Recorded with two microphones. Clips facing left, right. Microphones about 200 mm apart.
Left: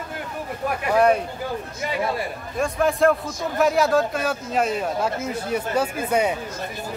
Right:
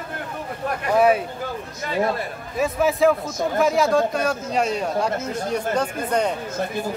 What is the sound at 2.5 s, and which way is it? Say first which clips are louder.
Speech: right 1 dB; 5° right (ahead or behind).